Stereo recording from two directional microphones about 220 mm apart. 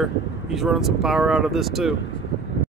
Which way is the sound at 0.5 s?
Centre (ahead or behind).